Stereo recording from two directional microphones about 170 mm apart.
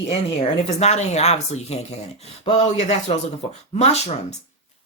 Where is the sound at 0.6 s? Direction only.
40° left (ahead or behind).